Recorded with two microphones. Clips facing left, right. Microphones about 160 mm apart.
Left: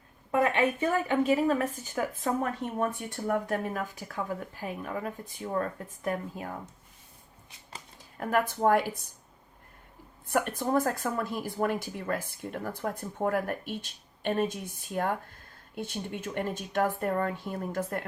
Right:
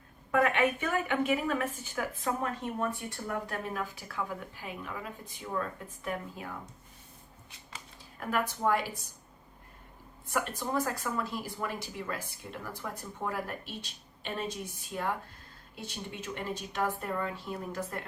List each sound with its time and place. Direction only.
0.3 s a woman's voice: 30° left (ahead or behind); by 6.6 s 45° left (ahead or behind)
8.2 s speech: 50° left (ahead or behind)
10.2 s speech: 55° left (ahead or behind)